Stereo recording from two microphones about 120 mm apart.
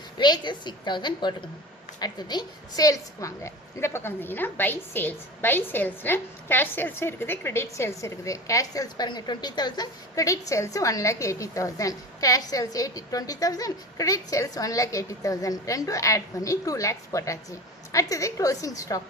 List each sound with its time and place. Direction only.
0.2 s a woman's voice: 35° left (ahead or behind)